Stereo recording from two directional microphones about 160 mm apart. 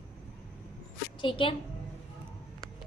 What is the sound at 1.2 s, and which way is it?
Speech, 30° left (ahead or behind).